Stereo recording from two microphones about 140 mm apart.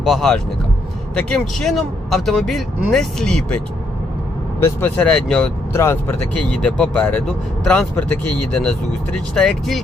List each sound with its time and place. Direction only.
0.0 s speech: centre (ahead or behind)
4.6 s speech: 10° left (ahead or behind)
5.7 s speech: 20° left (ahead or behind)
6.3 s speech: 10° left (ahead or behind)
9.3 s speech: 5° left (ahead or behind)